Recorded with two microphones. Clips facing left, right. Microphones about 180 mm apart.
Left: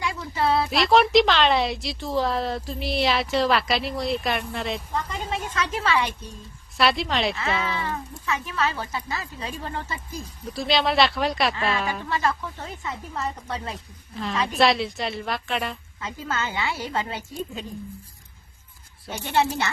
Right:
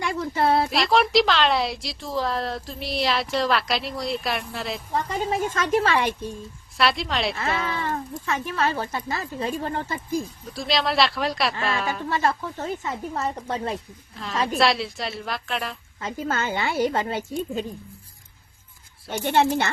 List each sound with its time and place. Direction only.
0.0 s a sound: 45° right (ahead or behind)
0.7 s speech: centre (ahead or behind)
5.5 s speech: 45° right (ahead or behind)
6.7 s speech: centre (ahead or behind)
7.3 s speech: 45° right (ahead or behind)
10.5 s speech: centre (ahead or behind)
12.0 s speech: 45° right (ahead or behind)
14.2 s speech: centre (ahead or behind)
16.0 s a woman's voice: 30° right (ahead or behind)
16.3 s speech: 50° right (ahead or behind)
19.1 s a child's voice: 55° right (ahead or behind)